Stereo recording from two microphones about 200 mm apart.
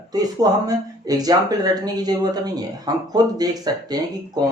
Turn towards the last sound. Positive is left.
turn(degrees=-20)  # may be behind; listen again after turning